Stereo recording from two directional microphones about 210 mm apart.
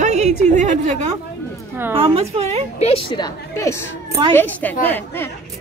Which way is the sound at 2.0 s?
25° right (ahead or behind).